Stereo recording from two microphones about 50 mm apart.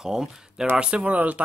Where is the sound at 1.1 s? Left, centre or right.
Right.